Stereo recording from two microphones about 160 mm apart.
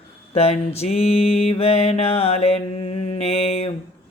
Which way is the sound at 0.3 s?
40° left (ahead or behind).